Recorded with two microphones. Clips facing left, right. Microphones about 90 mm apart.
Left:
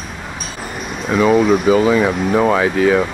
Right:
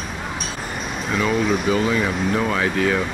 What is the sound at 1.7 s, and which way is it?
Speech, 5° left (ahead or behind).